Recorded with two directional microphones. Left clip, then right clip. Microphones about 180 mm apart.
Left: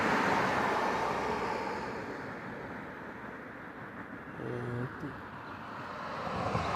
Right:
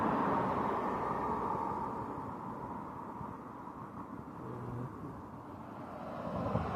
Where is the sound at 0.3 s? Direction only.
20° left (ahead or behind).